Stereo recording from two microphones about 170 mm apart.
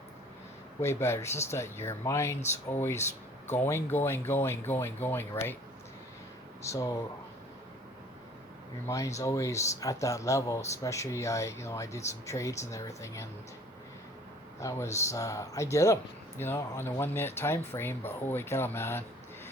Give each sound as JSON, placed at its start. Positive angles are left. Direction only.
{"t": 0.8, "sound": "speech", "side_deg": 15}
{"t": 6.6, "sound": "speech", "side_deg": 20}
{"t": 8.9, "sound": "speech", "side_deg": 20}
{"t": 14.6, "sound": "speech", "side_deg": 20}